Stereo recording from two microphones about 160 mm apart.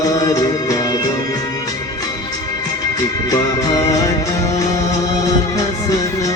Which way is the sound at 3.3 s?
20° left (ahead or behind).